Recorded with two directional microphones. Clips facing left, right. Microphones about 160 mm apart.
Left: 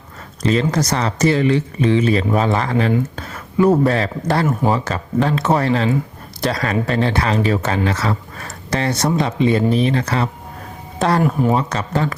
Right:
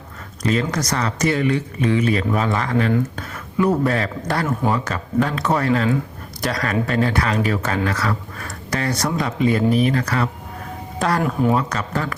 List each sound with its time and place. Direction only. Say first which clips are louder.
0.4 s speech: left 4 dB; 30° left (ahead or behind)